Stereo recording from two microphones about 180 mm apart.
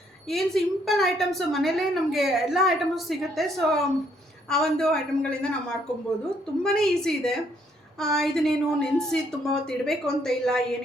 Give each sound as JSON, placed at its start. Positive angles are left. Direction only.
{"t": 0.3, "sound": "a woman's voice", "side_deg": 0}